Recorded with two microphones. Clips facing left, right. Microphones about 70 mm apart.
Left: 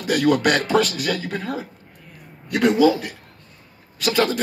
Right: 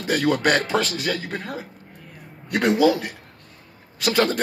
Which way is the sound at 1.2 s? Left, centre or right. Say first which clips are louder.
Left 3 dB; right.